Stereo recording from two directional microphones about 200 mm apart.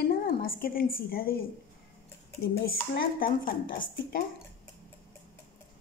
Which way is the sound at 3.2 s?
45° left (ahead or behind).